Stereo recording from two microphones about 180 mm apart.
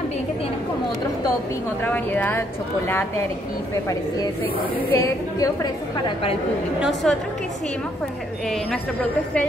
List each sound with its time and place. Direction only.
1.8 s a woman's voice: 10° left (ahead or behind)
4.9 s a woman's voice: 20° left (ahead or behind)
6.8 s a woman's voice: centre (ahead or behind)